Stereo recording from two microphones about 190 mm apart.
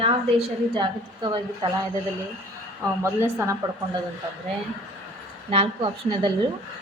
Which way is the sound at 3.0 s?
15° right (ahead or behind).